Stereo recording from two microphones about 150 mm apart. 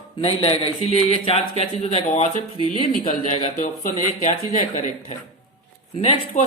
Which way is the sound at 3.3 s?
50° left (ahead or behind).